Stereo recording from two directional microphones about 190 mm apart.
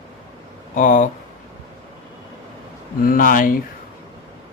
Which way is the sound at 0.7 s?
45° left (ahead or behind).